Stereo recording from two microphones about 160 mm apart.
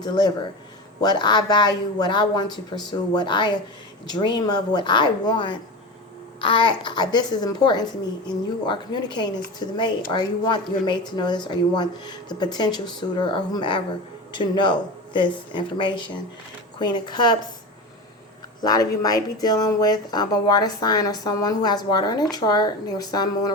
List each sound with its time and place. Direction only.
0.0 s speech: 25° left (ahead or behind)
18.6 s speech: 25° left (ahead or behind)